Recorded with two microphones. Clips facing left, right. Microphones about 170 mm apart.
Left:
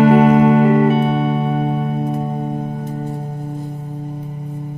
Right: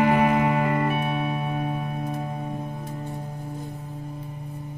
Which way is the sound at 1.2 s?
60° left (ahead or behind).